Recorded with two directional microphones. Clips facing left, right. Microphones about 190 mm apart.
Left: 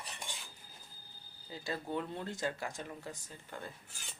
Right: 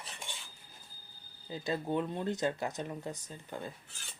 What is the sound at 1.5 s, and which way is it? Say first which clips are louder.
Speech: right 5 dB; 20° right (ahead or behind).